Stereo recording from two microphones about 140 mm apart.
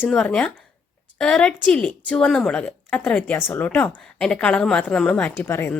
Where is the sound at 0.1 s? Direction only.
5° left (ahead or behind).